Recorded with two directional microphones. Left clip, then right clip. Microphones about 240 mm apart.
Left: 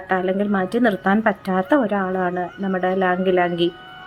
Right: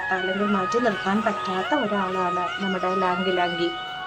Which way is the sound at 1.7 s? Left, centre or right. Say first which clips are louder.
Left 6 dB; centre.